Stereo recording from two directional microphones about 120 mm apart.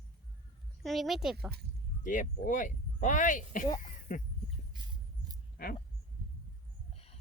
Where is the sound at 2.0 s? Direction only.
90° left.